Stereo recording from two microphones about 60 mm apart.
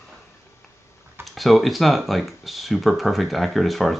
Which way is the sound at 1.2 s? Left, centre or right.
Centre.